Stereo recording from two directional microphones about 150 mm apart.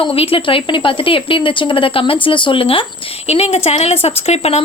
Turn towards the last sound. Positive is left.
turn(degrees=45)  # may be behind; listen again after turning